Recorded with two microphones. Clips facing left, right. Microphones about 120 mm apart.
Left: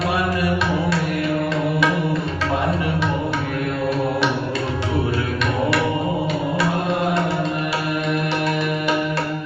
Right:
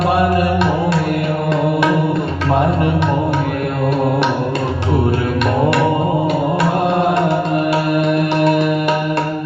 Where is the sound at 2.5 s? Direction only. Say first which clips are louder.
Right 7 dB; 55° right (ahead or behind).